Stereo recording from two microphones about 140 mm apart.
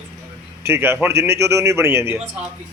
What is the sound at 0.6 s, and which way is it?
A man's voice, 15° right (ahead or behind).